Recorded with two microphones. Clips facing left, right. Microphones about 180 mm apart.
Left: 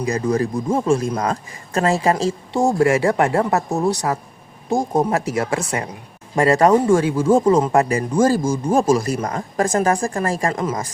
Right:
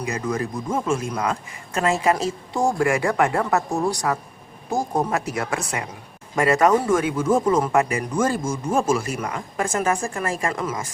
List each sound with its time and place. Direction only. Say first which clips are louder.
0.0 s speech: left 6 dB; 35° left (ahead or behind)